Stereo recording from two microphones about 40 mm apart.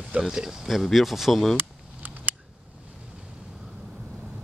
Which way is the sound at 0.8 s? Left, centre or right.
Centre.